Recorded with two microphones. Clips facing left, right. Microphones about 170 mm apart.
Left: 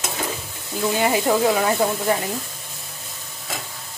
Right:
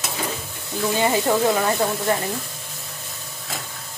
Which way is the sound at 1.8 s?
10° left (ahead or behind).